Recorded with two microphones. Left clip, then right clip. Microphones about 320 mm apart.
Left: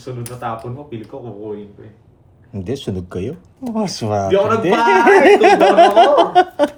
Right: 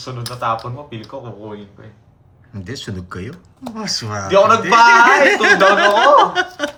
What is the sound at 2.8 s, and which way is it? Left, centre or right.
Speech, centre.